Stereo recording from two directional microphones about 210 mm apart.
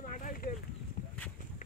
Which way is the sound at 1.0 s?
40° left (ahead or behind).